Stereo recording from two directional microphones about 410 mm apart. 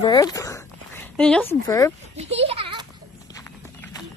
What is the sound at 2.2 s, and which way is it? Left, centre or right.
Speech, centre.